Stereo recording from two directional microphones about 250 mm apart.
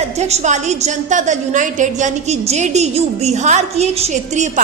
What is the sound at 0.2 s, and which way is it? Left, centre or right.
A woman's voice, right.